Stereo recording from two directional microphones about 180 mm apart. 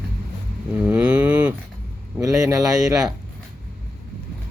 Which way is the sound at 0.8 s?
10° right (ahead or behind).